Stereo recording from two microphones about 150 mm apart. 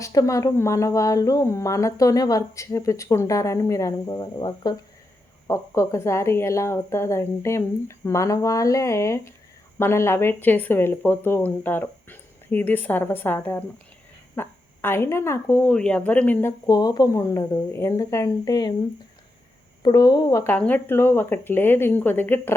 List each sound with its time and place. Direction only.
0.0 s speech: 20° left (ahead or behind)
19.8 s speech: 25° left (ahead or behind)